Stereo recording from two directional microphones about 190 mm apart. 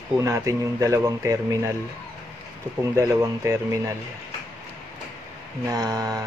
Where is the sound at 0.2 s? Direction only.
15° right (ahead or behind).